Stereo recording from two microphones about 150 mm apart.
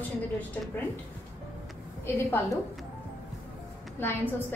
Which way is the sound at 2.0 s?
20° left (ahead or behind).